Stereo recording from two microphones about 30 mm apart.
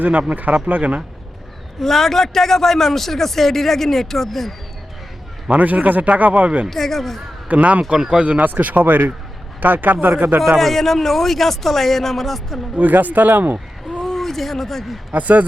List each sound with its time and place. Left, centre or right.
0.1 s speech: right
1.8 s a man's voice: centre
5.5 s speech: right
6.7 s a man's voice: centre
7.4 s speech: right
7.9 s speech: right
8.4 s speech: right
10.6 s a man's voice: centre
12.7 s speech: right
14.0 s a sound: centre
15.1 s speech: right